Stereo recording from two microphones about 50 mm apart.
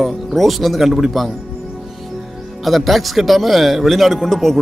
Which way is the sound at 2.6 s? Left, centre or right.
Centre.